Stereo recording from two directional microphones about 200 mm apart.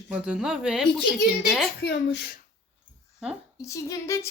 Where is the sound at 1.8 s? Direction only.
50° left (ahead or behind).